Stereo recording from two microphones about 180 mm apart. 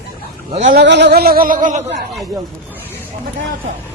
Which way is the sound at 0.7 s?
70° right (ahead or behind).